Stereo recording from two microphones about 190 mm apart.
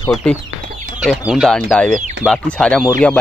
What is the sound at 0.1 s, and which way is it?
Speech, 5° left (ahead or behind).